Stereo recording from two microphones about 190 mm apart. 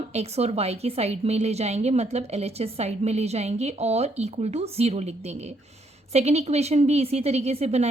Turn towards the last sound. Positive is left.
turn(degrees=-35)  # may be behind; listen again after turning